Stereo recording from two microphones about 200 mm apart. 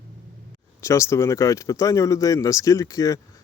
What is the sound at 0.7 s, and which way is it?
Speech, 15° left (ahead or behind).